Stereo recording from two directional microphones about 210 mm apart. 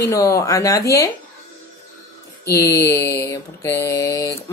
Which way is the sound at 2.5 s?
15° left (ahead or behind).